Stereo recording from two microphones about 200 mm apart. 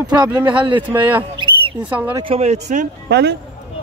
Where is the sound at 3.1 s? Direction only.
55° right (ahead or behind).